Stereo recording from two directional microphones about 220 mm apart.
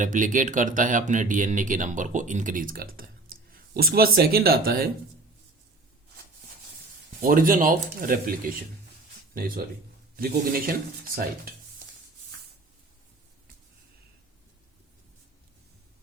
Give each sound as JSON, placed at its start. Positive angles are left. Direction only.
{"t": 0.0, "sound": "speech", "side_deg": -35}
{"t": 7.2, "sound": "speech", "side_deg": -40}